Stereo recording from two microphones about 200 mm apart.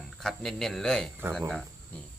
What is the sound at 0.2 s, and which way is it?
Speech, centre (ahead or behind).